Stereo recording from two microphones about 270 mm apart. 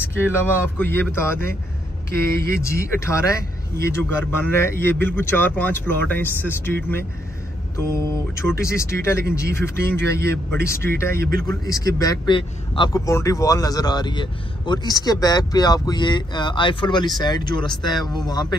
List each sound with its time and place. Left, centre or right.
0.3 s a man's voice: centre
2.1 s speech: right
2.6 s a man's voice: centre
10.1 s speech: right
10.5 s a man's voice: centre
11.1 s speech: right
11.4 s a man's voice: centre